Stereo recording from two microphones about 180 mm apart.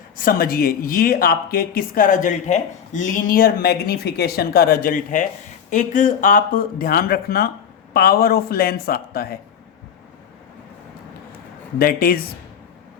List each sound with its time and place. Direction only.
0.2 s speech: 50° left (ahead or behind)
11.8 s speech: 55° left (ahead or behind)